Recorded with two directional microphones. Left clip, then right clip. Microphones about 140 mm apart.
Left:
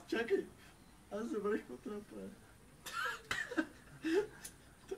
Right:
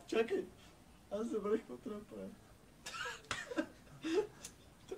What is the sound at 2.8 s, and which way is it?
Cough, 10° left (ahead or behind).